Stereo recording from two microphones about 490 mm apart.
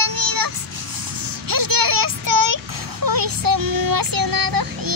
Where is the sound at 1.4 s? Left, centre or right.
Right.